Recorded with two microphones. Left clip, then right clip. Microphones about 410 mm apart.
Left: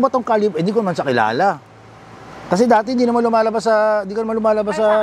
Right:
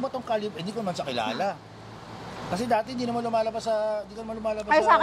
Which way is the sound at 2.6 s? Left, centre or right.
Left.